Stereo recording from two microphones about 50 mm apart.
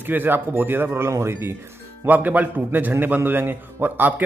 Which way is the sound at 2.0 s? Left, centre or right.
Right.